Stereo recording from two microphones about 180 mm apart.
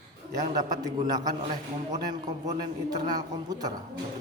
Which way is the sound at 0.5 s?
20° right (ahead or behind).